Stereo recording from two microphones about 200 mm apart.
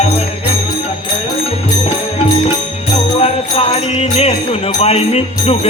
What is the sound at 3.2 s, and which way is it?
Music, 30° left (ahead or behind).